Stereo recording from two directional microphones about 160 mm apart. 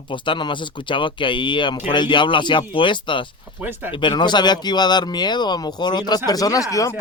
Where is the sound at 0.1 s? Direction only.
30° left (ahead or behind).